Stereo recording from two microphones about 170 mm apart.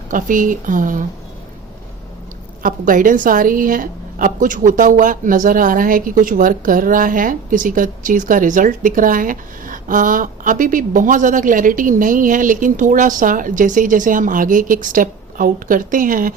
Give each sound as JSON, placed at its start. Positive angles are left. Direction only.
{"t": 0.1, "sound": "a woman's voice", "side_deg": -50}
{"t": 2.6, "sound": "a woman's voice", "side_deg": -55}